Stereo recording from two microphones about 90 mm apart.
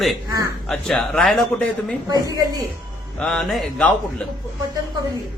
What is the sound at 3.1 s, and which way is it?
Speech, 10° left (ahead or behind).